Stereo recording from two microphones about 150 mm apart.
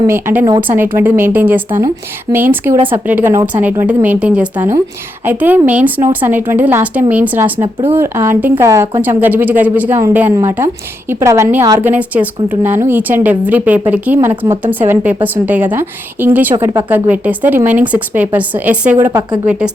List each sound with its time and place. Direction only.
0.1 s a woman's voice: 15° right (ahead or behind)